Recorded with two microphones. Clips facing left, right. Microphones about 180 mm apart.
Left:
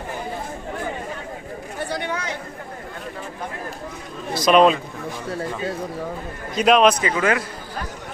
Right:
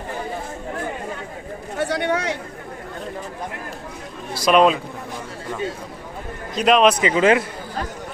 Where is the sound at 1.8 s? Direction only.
70° right (ahead or behind).